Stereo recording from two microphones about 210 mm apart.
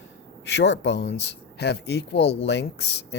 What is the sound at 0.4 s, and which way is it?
Speech, 55° left (ahead or behind).